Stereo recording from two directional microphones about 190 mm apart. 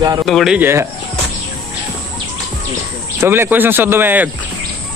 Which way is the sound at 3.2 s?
10° right (ahead or behind).